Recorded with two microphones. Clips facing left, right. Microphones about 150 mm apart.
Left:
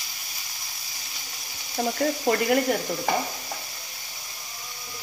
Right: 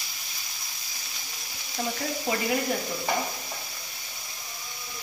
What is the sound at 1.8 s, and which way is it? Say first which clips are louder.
Speech: left 6 dB; 55° left (ahead or behind).